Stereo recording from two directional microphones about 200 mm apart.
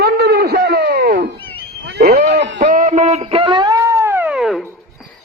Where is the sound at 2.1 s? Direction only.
35° right (ahead or behind); by 4.7 s centre (ahead or behind).